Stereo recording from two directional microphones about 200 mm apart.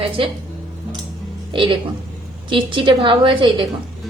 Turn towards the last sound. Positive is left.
turn(degrees=-25)  # may be behind; listen again after turning